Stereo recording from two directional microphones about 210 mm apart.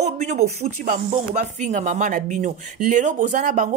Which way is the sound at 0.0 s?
35° right (ahead or behind).